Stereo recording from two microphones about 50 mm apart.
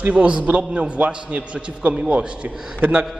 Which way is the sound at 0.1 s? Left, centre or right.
Right.